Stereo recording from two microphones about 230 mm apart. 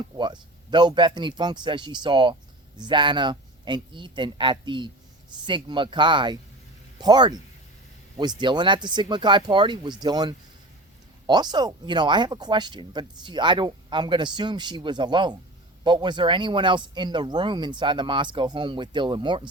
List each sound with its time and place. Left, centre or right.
0.0 s speech: centre